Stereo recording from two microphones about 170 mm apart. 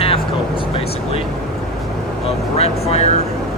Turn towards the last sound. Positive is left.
turn(degrees=40)  # may be behind; listen again after turning